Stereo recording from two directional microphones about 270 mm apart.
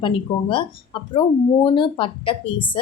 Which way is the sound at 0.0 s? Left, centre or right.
Centre.